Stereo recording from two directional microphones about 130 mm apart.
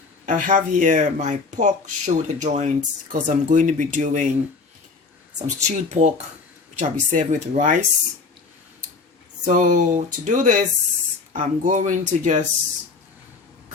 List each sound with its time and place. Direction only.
0.3 s speech: 85° right
5.4 s speech: 65° right (ahead or behind)
6.7 s speech: 75° right (ahead or behind)
9.4 s speech: 80° right